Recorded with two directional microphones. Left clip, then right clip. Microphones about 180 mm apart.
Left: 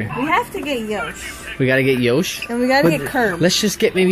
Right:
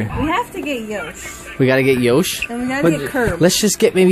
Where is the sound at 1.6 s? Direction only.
15° right (ahead or behind).